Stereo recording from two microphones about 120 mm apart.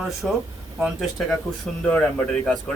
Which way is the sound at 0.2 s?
Centre (ahead or behind).